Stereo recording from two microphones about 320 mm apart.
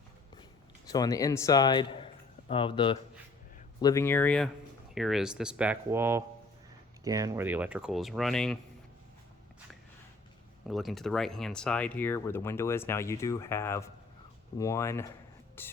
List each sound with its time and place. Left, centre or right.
0.9 s speech: centre
10.7 s speech: centre